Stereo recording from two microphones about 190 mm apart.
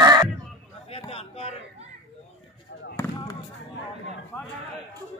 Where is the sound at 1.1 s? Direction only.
30° left (ahead or behind).